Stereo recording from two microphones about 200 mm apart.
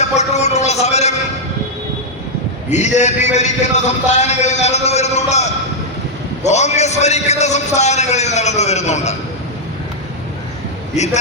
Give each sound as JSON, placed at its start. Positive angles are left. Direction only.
{"t": 0.0, "sound": "a sound", "side_deg": 35}
{"t": 2.6, "sound": "a man's voice", "side_deg": 35}
{"t": 10.9, "sound": "a man's voice", "side_deg": 35}